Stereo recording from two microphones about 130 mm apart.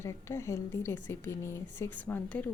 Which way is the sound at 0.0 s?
20° left (ahead or behind).